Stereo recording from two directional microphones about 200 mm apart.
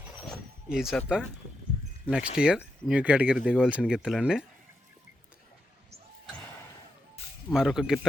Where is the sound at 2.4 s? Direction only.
5° right (ahead or behind).